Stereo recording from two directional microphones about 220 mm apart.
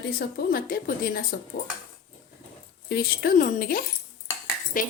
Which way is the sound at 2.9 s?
40° left (ahead or behind).